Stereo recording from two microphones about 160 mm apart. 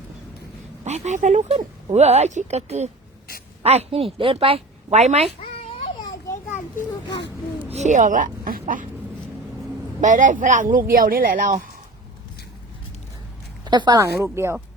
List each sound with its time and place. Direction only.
0.9 s a woman's voice: 45° right (ahead or behind)
6.0 s children playing: 25° left (ahead or behind)
7.7 s a woman's voice: 45° right (ahead or behind)
10.0 s speech: 50° right (ahead or behind)
13.7 s a woman's voice: 25° right (ahead or behind)
14.3 s speech: 15° right (ahead or behind)